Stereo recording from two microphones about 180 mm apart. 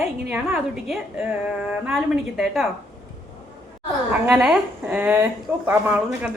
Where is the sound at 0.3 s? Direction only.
5° right (ahead or behind).